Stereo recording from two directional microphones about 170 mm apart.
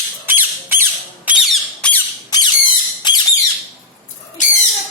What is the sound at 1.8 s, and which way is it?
Squawk, 10° left (ahead or behind).